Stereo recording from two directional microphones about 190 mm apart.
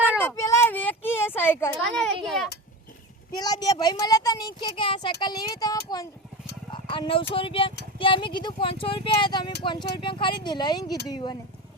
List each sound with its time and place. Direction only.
0.2 s a sound: 15° left (ahead or behind)
2.2 s a child's voice: centre (ahead or behind)
3.3 s speech: 20° left (ahead or behind)
4.7 s speech: 30° left (ahead or behind)
6.7 s a sound: 25° left (ahead or behind)
7.3 s speech: 30° left (ahead or behind)